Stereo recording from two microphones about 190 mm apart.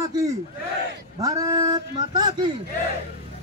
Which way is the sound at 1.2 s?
20° right (ahead or behind).